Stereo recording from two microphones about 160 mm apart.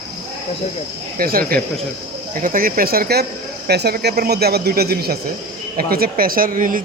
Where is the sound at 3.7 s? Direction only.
85° right.